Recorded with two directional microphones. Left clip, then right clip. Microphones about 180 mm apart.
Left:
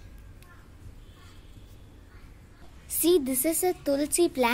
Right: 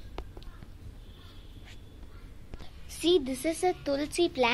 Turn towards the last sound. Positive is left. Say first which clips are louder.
# left 2 dB
turn(degrees=50)  # may be behind; listen again after turning